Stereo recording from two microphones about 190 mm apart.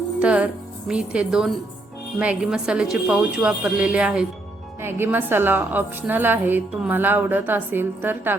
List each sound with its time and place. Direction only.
0.2 s a woman's voice: 5° right (ahead or behind)